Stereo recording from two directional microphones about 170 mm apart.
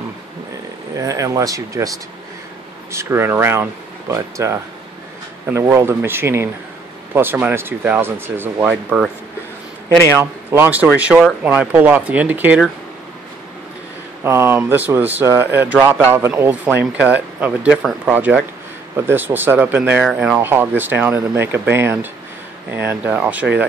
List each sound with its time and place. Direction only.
0.9 s speech: 20° right (ahead or behind)
9.8 s speech: 15° left (ahead or behind)
10.1 s speech: 15° right (ahead or behind)
14.2 s speech: 15° right (ahead or behind)